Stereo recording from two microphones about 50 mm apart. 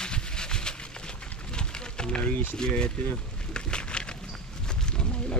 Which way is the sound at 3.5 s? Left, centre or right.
Centre.